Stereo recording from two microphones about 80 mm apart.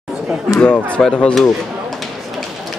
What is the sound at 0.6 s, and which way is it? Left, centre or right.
Speech, centre.